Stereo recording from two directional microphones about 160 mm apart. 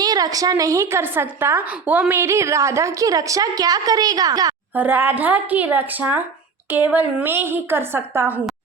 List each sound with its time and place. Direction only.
0.0 s a woman's voice: 25° right (ahead or behind)
4.7 s a woman's voice: 10° right (ahead or behind)